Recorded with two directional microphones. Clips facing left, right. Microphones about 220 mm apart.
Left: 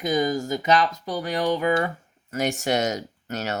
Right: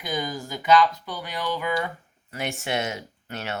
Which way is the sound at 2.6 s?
40° left (ahead or behind).